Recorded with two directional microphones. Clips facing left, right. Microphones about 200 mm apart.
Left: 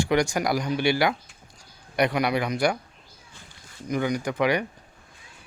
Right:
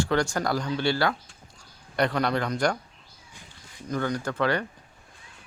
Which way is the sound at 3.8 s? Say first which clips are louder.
Left 2 dB; 15° left (ahead or behind).